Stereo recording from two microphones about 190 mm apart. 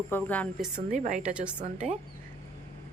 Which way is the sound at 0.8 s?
40° right (ahead or behind).